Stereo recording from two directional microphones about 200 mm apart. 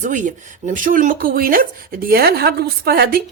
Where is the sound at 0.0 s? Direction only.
40° right (ahead or behind).